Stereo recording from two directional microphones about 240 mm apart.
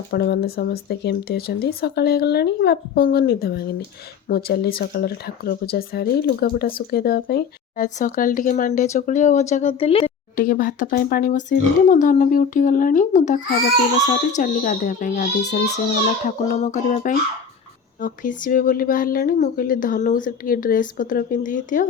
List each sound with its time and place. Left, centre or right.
0.1 s speech: left
10.3 s speech: left